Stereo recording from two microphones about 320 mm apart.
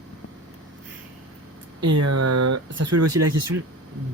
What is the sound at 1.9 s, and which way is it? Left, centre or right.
Speech, right.